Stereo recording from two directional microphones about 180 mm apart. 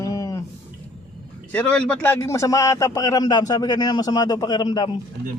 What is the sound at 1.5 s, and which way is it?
A man's voice, 5° left (ahead or behind).